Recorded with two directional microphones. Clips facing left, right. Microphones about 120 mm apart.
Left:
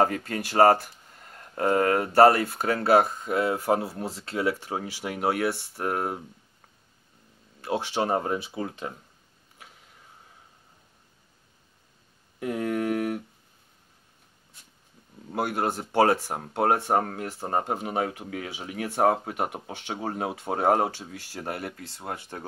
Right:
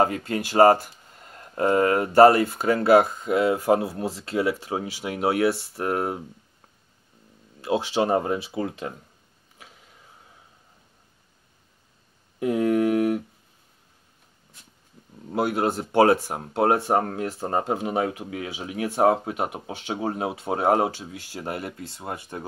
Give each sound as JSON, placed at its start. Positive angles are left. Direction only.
{"t": 0.0, "sound": "speech", "side_deg": -15}
{"t": 3.9, "sound": "speech", "side_deg": -5}
{"t": 4.4, "sound": "speech", "side_deg": -15}
{"t": 7.6, "sound": "speech", "side_deg": -15}
{"t": 12.4, "sound": "a sound", "side_deg": -20}
{"t": 15.2, "sound": "speech", "side_deg": -20}
{"t": 16.7, "sound": "speech", "side_deg": -10}
{"t": 17.0, "sound": "speech", "side_deg": -25}
{"t": 17.4, "sound": "speech", "side_deg": 5}
{"t": 17.8, "sound": "speech", "side_deg": -20}